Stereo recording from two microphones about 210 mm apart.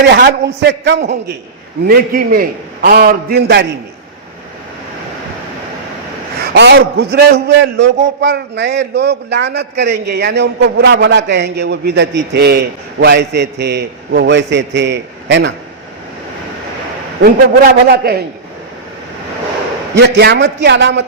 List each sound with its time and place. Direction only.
0.1 s a man's voice: 50° right (ahead or behind)
1.9 s a man's voice: 45° right (ahead or behind)
6.4 s a man's voice: 50° right (ahead or behind)
17.2 s a man's voice: 45° right (ahead or behind)
20.0 s a man's voice: 50° right (ahead or behind)